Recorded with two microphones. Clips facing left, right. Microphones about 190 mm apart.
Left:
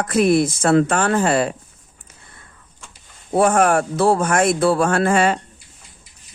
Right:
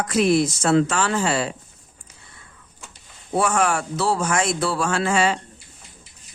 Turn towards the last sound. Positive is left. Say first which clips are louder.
# left 4 dB
turn(degrees=55)  # may be behind; listen again after turning